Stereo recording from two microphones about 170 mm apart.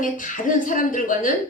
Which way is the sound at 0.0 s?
50° left (ahead or behind).